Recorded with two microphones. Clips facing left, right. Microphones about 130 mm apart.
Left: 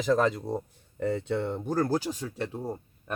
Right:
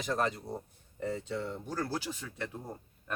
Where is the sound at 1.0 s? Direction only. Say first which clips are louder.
Left 7 dB; 65° left (ahead or behind).